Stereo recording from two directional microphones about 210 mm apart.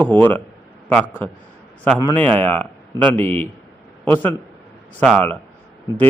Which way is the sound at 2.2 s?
10° left (ahead or behind).